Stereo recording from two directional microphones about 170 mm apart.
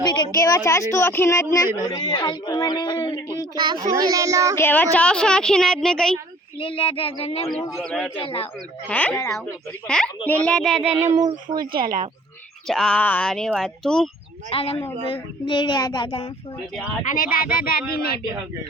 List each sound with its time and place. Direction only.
0.0 s a woman's voice: 25° left (ahead or behind)
1.9 s speech: 25° left (ahead or behind)
3.5 s speech: 25° right (ahead or behind)
4.5 s a woman's voice: 10° left (ahead or behind)
6.6 s child singing: 30° left (ahead or behind)
7.9 s a woman's voice: 5° left (ahead or behind)
8.1 s child singing: 30° left (ahead or behind)
8.9 s a woman's voice: 10° left (ahead or behind)
9.8 s a woman's voice: 5° left (ahead or behind)
11.3 s speech: 55° right (ahead or behind)
12.6 s a woman's voice: 5° left (ahead or behind)
14.5 s child singing: 35° left (ahead or behind)
15.1 s speech: 30° left (ahead or behind)
17.1 s speech: 55° left (ahead or behind)